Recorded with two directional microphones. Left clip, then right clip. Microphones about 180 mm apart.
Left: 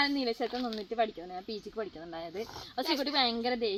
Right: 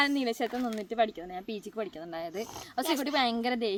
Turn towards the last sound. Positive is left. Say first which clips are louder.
# right 1 dB
turn(degrees=-40)  # may be behind; listen again after turning